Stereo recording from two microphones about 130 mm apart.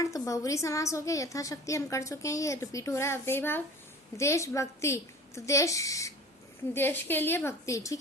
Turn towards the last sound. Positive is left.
turn(degrees=25)  # may be behind; listen again after turning